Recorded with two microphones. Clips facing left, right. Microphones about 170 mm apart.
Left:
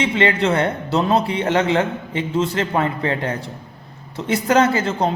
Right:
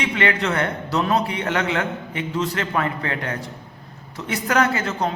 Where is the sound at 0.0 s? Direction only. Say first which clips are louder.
Left 4 dB; 25° left (ahead or behind).